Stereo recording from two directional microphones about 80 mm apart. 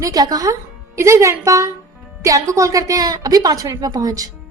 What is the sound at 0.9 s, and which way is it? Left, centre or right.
A woman's voice, right.